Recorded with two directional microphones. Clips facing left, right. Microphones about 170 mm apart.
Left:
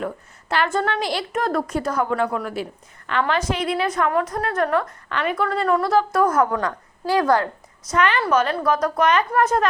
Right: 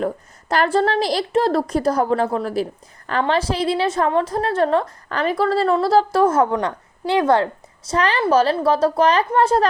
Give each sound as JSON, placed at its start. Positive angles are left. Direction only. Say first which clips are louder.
{"t": 0.0, "sound": "a woman's voice", "louder": "right 5 dB", "side_deg": -40}